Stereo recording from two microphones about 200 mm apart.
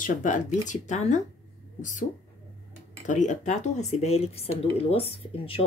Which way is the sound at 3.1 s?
40° left (ahead or behind).